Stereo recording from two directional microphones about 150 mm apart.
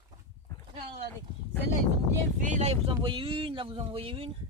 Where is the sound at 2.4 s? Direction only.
50° right (ahead or behind).